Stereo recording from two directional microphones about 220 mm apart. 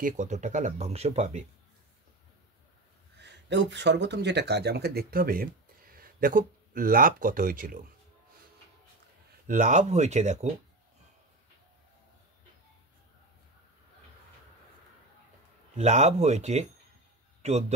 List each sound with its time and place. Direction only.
0.0 s speech: 35° right (ahead or behind)
3.2 s speech: 50° right (ahead or behind)
9.5 s speech: 35° right (ahead or behind)
15.7 s speech: 30° right (ahead or behind)